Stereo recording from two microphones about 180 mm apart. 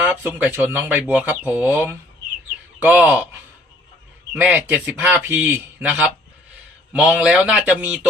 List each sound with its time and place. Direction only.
0.0 s speech: 10° right (ahead or behind)
4.4 s speech: 10° right (ahead or behind)